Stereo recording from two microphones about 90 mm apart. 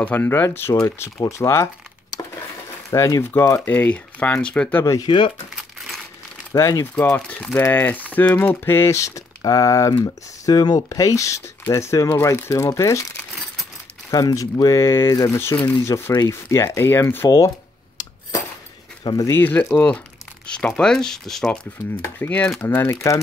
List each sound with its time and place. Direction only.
0.0 s speech: 25° left (ahead or behind)
3.6 s speech: 20° left (ahead or behind)
5.0 s speech: 65° left (ahead or behind)
6.5 s speech: 35° left (ahead or behind)
7.0 s speech: 20° left (ahead or behind); by 10.9 s 50° left (ahead or behind)
10.9 s speech: 35° left (ahead or behind)
18.0 s a sound: 50° left (ahead or behind)
19.1 s speech: 35° left (ahead or behind)
19.4 s speech: 20° left (ahead or behind); by 21.5 s 5° left (ahead or behind)
22.6 s speech: 25° left (ahead or behind)